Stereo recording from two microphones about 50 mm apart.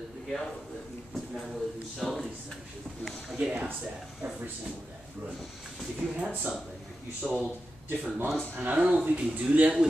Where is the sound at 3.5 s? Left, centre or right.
Right.